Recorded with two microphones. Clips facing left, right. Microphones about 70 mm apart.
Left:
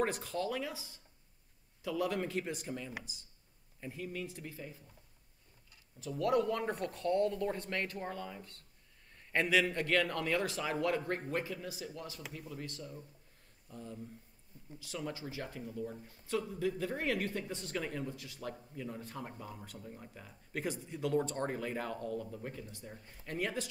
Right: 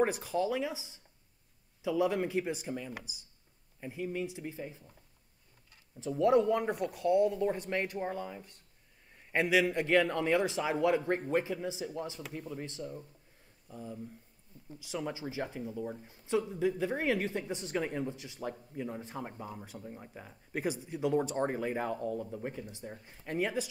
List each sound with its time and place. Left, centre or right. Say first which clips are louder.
0.0 s speech: right 5 dB; centre
5.9 s speech: right 5 dB; right
13.7 s speech: right 3 dB; centre